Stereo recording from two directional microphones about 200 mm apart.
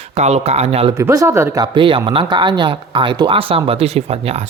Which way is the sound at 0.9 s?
15° right (ahead or behind).